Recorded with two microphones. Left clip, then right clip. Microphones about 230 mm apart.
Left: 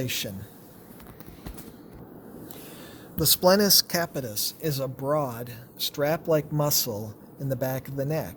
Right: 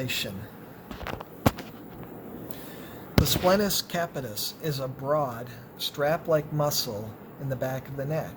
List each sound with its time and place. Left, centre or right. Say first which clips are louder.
0.0 s speech: even; left
3.2 s speech: left 5 dB; left